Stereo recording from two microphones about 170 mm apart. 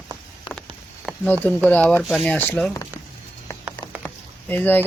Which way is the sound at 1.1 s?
Centre (ahead or behind).